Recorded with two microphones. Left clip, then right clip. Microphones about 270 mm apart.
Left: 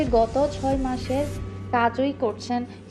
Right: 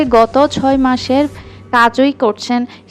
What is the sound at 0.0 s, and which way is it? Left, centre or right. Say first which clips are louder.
A woman's voice: right 11 dB; right.